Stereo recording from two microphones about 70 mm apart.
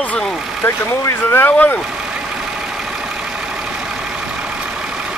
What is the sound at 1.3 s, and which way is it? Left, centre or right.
Speech, left.